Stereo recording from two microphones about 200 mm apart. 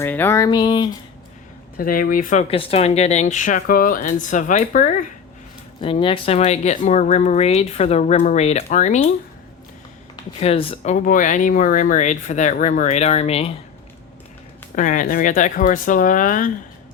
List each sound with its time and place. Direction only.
0.0 s a sound: 10° left (ahead or behind)
1.8 s speech: 45° left (ahead or behind)
5.8 s speech: 25° left (ahead or behind)
10.4 s speech: 30° left (ahead or behind)
14.8 s speech: 40° left (ahead or behind)